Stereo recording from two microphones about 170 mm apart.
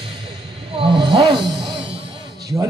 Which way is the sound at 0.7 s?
30° right (ahead or behind).